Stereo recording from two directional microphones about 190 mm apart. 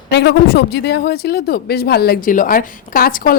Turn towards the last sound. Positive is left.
turn(degrees=50)  # may be behind; listen again after turning